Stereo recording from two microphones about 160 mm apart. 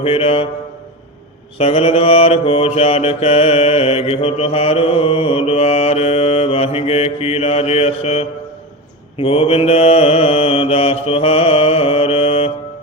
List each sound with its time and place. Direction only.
0.0 s mantra: 35° left (ahead or behind)
1.5 s mantra: 40° left (ahead or behind)